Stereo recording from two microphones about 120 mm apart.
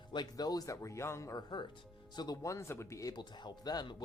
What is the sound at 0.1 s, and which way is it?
A woman's voice, 35° left (ahead or behind).